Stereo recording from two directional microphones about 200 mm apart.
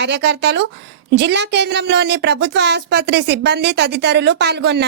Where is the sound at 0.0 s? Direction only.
60° right (ahead or behind).